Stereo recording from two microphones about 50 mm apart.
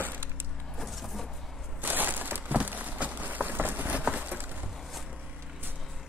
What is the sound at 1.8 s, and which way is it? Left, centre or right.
Crushing, right.